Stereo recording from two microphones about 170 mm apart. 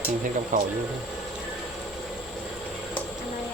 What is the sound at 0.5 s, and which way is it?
Speech, 50° right (ahead or behind).